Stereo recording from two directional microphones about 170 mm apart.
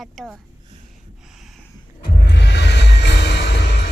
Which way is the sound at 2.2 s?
80° left.